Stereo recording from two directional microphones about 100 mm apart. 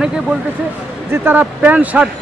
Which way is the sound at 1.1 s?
20° right (ahead or behind).